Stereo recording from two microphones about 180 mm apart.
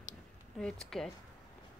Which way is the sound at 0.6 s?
5° left (ahead or behind).